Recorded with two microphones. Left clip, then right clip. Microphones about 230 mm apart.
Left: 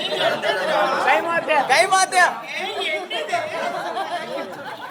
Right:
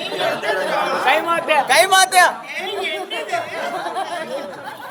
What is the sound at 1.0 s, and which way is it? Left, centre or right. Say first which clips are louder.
Chatter: right 2 dB; right.